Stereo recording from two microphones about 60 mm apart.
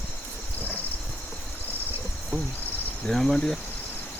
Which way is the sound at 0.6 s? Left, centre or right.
Left.